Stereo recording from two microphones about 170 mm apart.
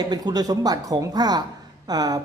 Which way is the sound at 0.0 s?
25° right (ahead or behind).